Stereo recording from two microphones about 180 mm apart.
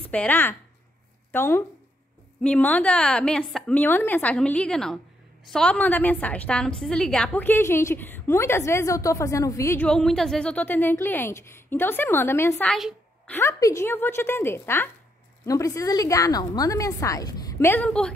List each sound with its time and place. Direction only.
0.0 s a woman's voice: 10° left (ahead or behind)
9.8 s a woman's voice: 5° left (ahead or behind)